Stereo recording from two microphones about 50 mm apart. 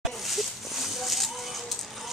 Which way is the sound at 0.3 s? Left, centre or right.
Centre.